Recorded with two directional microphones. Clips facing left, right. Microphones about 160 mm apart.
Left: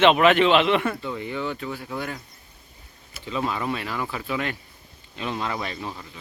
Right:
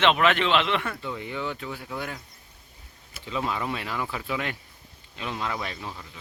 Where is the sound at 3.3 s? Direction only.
15° right (ahead or behind).